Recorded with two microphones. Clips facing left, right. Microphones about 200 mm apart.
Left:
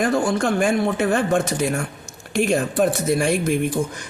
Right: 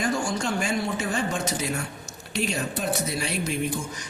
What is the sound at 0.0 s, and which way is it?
Speech, 60° left (ahead or behind).